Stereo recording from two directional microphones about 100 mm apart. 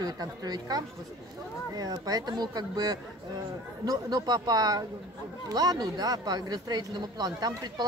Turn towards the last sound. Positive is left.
turn(degrees=-40)  # may be behind; listen again after turning